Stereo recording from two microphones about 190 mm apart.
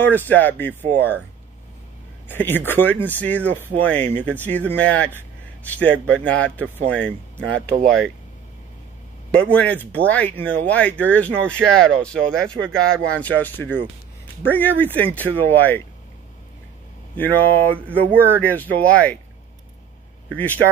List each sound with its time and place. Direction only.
0.0 s speech: 10° left (ahead or behind)
2.2 s speech: 10° left (ahead or behind)
9.3 s speech: 5° left (ahead or behind)
17.2 s speech: 10° left (ahead or behind)